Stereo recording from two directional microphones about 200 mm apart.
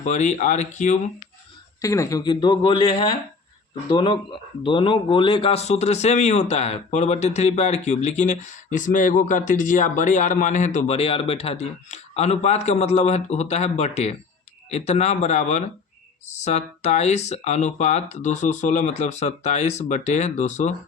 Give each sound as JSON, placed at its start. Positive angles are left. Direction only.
{"t": 0.0, "sound": "speech", "side_deg": 35}
{"t": 1.8, "sound": "a man's voice", "side_deg": 15}